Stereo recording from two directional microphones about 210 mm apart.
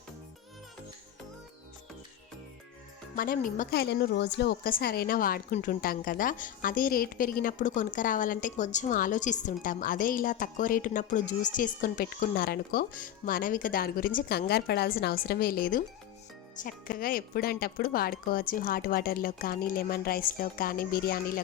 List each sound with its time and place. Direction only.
3.2 s a woman's voice: 40° left (ahead or behind)